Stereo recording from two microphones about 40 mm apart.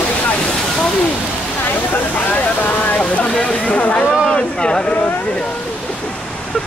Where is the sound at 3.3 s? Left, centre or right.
Left.